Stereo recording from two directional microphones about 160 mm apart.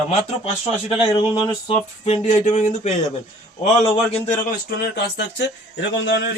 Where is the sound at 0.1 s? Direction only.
40° left (ahead or behind).